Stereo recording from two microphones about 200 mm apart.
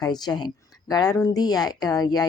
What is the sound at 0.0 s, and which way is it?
Speech, 20° left (ahead or behind).